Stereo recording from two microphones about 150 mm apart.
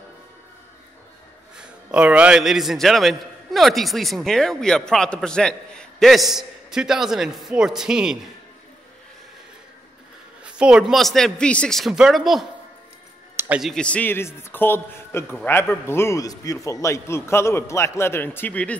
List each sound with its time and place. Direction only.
1.6 s a man's voice: 5° right (ahead or behind)
10.4 s a man's voice: 5° right (ahead or behind)
13.6 s a man's voice: 5° left (ahead or behind)